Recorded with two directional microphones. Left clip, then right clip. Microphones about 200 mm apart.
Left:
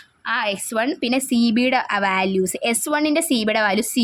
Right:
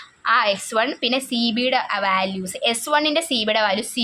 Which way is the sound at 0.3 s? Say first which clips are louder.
Right 4 dB; 20° left (ahead or behind).